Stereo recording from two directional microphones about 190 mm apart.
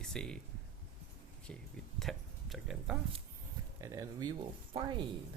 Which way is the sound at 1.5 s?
5° left (ahead or behind).